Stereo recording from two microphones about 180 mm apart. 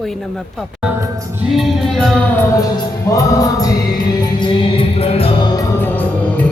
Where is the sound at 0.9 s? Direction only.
10° right (ahead or behind).